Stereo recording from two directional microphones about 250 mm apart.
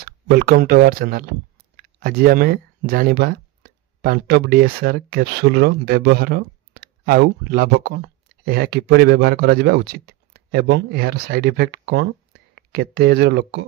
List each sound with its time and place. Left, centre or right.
0.0 s speech: right